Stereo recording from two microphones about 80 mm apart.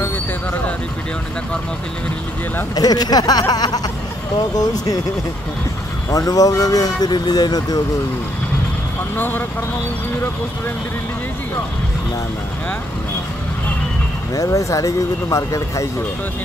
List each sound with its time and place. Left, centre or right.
2.7 s speech: left
6.0 s speech: left
9.1 s speech: left
14.3 s speech: left